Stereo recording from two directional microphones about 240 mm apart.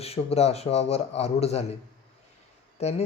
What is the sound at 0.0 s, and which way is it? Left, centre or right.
Speech, left.